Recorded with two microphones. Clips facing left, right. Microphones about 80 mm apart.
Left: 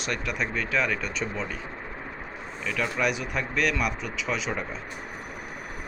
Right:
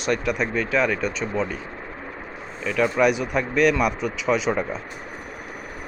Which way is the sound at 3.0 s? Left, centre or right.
Centre.